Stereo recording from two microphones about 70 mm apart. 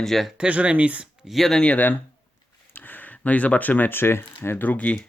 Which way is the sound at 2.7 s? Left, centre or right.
Left.